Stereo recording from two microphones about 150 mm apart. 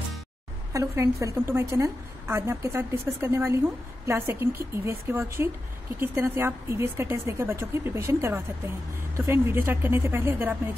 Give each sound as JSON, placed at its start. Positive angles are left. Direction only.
{"t": 0.7, "sound": "a woman's voice", "side_deg": -20}